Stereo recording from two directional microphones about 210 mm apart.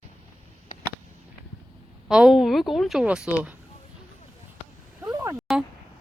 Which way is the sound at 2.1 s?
5° right (ahead or behind).